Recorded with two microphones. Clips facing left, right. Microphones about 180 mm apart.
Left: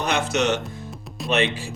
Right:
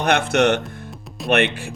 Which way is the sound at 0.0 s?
60° right (ahead or behind).